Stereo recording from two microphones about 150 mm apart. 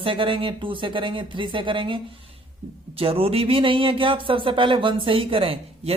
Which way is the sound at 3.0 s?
40° right (ahead or behind).